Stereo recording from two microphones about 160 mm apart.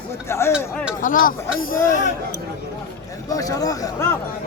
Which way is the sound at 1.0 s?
60° left (ahead or behind).